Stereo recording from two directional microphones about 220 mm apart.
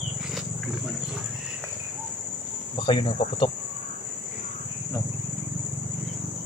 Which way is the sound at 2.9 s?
20° left (ahead or behind).